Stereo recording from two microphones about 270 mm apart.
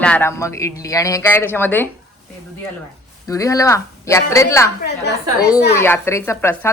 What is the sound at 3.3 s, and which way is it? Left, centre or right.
Speech, centre.